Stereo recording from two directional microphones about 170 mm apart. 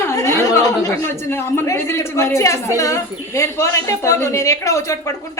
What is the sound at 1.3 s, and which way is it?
A woman's voice, 15° left (ahead or behind).